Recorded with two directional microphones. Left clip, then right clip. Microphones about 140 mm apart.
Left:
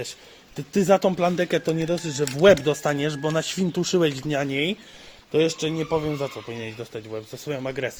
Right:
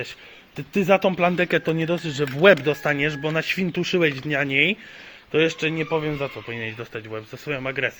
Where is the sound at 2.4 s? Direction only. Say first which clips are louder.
Right 1 dB; 40° left (ahead or behind).